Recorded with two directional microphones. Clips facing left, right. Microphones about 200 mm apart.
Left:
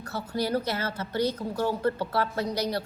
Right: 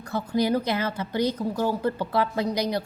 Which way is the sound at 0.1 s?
15° right (ahead or behind).